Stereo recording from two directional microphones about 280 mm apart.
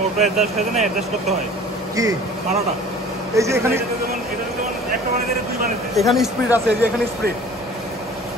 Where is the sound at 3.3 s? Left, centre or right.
Centre.